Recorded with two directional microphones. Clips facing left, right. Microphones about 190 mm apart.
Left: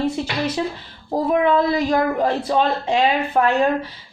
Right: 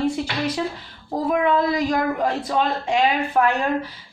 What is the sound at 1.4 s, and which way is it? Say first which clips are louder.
Speech: left 2 dB; 30° left (ahead or behind).